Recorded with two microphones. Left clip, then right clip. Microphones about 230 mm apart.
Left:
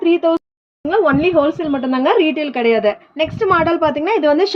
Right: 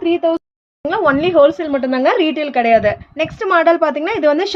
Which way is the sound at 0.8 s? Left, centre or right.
Right.